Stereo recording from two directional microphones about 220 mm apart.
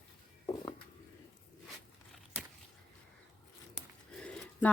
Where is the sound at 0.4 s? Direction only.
20° left (ahead or behind).